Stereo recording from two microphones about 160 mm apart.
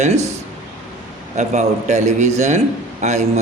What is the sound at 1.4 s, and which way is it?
A man's voice, 45° right (ahead or behind).